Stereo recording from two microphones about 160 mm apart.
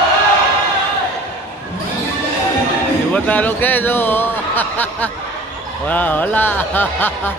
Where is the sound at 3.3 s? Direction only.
10° left (ahead or behind).